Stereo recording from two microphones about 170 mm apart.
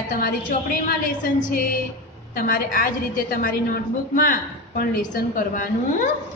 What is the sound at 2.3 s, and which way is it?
A woman's voice, 55° left (ahead or behind).